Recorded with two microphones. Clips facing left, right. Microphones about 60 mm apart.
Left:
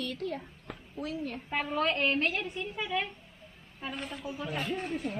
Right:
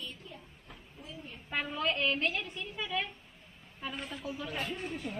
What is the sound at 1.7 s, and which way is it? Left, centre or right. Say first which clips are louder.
Speech: left 4 dB; left.